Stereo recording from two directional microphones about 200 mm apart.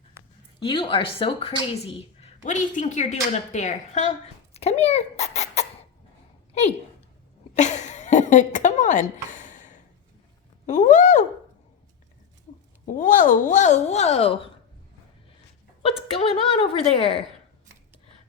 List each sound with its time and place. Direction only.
0.6 s speech: 25° left (ahead or behind)
2.4 s a child's voice: 40° left (ahead or behind)
7.5 s a sound: 35° left (ahead or behind)
10.7 s speech: 35° left (ahead or behind)
12.8 s speech: 40° left (ahead or behind)
15.8 s speech: 30° left (ahead or behind)